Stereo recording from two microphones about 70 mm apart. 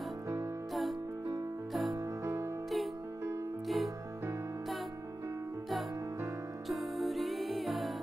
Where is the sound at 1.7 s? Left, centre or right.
Centre.